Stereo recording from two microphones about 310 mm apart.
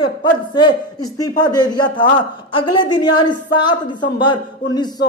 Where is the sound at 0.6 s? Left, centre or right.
Centre.